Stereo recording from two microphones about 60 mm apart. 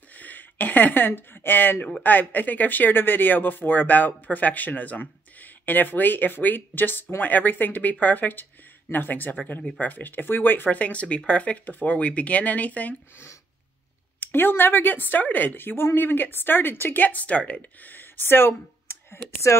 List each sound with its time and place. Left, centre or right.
0.1 s a woman's voice: left
14.2 s a woman's voice: left